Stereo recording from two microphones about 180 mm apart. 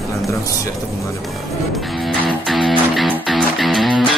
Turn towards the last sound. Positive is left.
turn(degrees=0)  # may be behind; listen again after turning